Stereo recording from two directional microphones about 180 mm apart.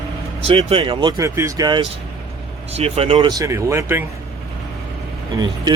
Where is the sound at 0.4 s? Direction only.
30° right (ahead or behind).